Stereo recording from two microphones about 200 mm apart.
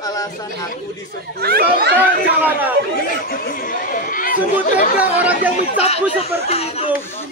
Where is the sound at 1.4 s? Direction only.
50° right (ahead or behind).